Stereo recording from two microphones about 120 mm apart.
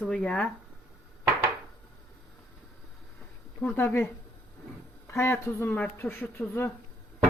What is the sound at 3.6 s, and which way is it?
A woman's voice, 15° left (ahead or behind).